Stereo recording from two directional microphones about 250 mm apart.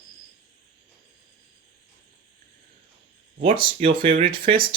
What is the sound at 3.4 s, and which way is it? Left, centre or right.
Speech, right.